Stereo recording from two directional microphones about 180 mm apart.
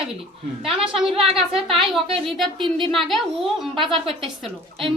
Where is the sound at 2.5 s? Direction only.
25° right (ahead or behind).